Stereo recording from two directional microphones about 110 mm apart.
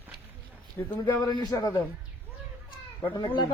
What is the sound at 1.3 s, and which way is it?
Speech, 35° left (ahead or behind).